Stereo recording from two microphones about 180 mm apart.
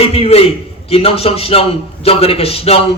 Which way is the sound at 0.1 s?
35° left (ahead or behind).